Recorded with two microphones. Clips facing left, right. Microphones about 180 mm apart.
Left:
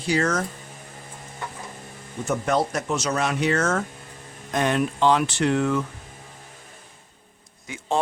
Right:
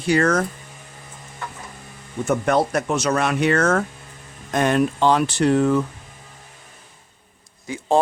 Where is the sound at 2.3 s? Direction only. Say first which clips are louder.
Right 4 dB; 60° right (ahead or behind).